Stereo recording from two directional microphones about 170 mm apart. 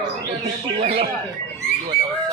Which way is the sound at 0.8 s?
35° right (ahead or behind).